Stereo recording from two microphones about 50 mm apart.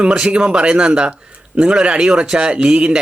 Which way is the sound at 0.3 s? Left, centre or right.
Right.